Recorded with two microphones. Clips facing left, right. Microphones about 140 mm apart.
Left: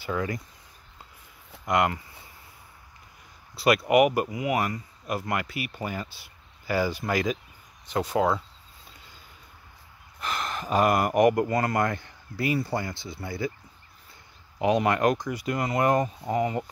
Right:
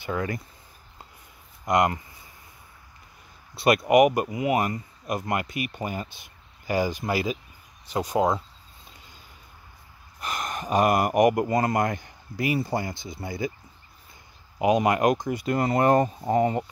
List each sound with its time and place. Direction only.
1.7 s a man's voice: 20° right (ahead or behind)
3.5 s a man's voice: 25° right (ahead or behind)
10.2 s a sound: 40° right (ahead or behind)
10.6 s a man's voice: 20° right (ahead or behind)
14.6 s speech: 15° right (ahead or behind)
15.5 s speech: 35° right (ahead or behind)